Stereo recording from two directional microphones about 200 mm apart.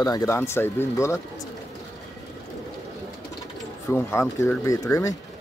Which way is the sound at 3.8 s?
10° left (ahead or behind).